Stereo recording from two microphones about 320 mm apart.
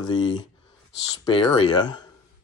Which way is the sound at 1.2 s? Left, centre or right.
Centre.